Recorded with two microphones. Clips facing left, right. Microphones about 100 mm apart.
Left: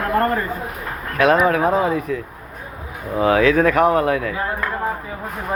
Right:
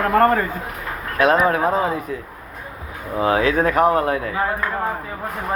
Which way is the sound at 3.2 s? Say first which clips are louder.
Left 3 dB; 25° right (ahead or behind).